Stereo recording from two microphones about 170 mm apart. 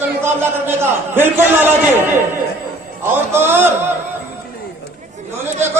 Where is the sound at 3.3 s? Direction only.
15° right (ahead or behind).